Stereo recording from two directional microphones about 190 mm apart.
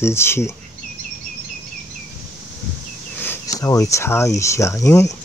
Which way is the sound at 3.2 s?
15° left (ahead or behind).